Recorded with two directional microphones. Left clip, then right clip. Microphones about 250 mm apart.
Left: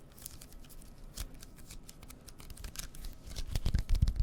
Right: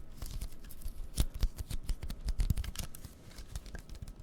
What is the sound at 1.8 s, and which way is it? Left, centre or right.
Scissors, right.